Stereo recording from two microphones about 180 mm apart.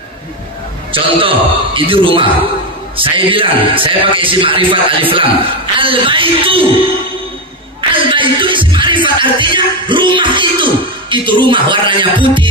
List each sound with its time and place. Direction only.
0.9 s a man's voice: 30° right (ahead or behind)
7.9 s music: 30° right (ahead or behind)